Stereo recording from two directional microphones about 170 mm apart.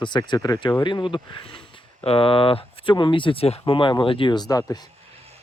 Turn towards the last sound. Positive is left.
turn(degrees=25)  # may be behind; listen again after turning